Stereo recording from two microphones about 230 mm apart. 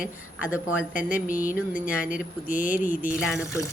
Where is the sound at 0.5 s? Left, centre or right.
Centre.